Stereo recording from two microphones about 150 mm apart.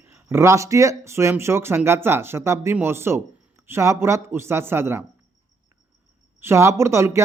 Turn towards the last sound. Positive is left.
turn(degrees=-20)  # may be behind; listen again after turning